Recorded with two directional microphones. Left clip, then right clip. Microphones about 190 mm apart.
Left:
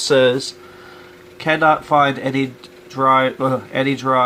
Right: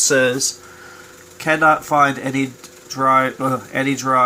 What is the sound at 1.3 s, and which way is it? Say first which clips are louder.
Speech: even; 15° left (ahead or behind).